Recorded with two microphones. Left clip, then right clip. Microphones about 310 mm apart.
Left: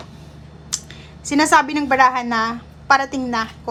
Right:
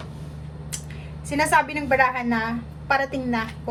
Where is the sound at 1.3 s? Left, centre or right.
Centre.